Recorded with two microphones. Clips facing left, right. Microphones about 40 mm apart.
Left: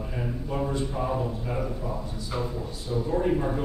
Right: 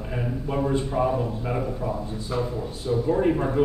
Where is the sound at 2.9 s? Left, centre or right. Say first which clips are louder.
Right 4 dB; right.